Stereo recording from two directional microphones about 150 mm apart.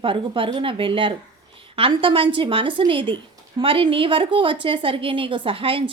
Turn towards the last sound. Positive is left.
turn(degrees=-35)  # may be behind; listen again after turning